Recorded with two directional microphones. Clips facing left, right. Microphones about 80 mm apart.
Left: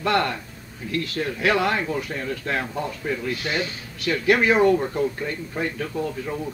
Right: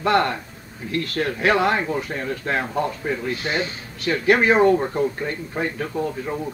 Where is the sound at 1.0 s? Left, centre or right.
Right.